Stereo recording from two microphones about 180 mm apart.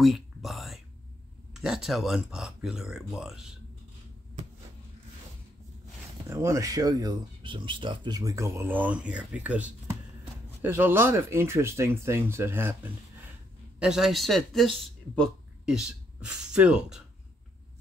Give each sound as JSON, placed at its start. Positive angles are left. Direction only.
{"t": 0.0, "sound": "whispering", "side_deg": 0}
{"t": 1.5, "sound": "speech", "side_deg": 0}
{"t": 6.2, "sound": "speech", "side_deg": -15}